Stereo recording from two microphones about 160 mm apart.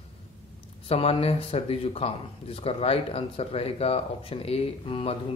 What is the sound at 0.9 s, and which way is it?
A man's voice, 35° left (ahead or behind).